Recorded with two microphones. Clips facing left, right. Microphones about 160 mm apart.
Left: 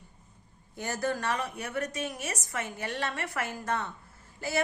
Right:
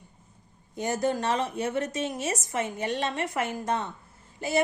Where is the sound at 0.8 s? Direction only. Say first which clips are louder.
Right 5 dB; 20° right (ahead or behind).